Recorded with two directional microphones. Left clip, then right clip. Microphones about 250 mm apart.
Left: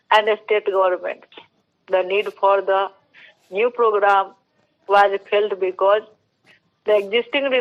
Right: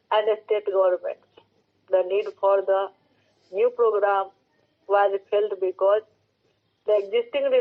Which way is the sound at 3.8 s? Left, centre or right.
Left.